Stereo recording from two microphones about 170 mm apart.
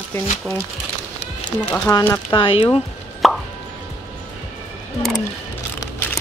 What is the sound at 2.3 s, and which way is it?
Speech, 30° left (ahead or behind).